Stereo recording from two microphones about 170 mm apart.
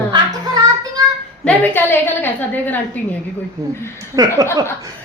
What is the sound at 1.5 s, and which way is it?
Speech, 10° left (ahead or behind).